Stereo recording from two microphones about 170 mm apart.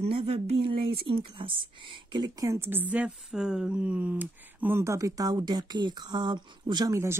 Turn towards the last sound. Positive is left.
turn(degrees=-15)  # may be behind; listen again after turning